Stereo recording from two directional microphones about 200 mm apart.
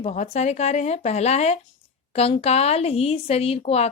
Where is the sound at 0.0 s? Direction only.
35° left (ahead or behind).